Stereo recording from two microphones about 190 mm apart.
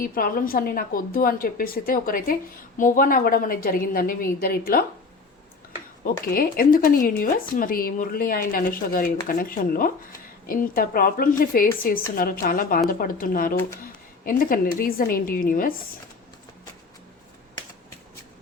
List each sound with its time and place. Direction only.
0.0 s speech: 50° left (ahead or behind)
6.2 s speech: 50° left (ahead or behind)